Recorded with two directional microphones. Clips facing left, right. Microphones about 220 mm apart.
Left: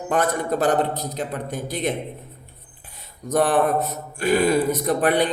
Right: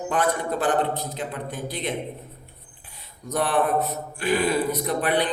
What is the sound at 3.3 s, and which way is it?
A man's voice, 45° left (ahead or behind).